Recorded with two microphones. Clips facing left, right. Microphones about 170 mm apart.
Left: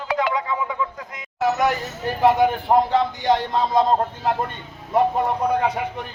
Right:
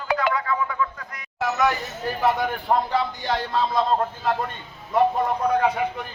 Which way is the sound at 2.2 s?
20° left (ahead or behind).